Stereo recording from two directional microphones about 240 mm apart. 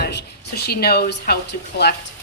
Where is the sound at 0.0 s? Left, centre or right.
Left.